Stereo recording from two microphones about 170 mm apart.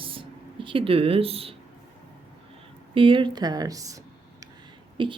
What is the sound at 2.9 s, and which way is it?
A woman's voice, 30° right (ahead or behind).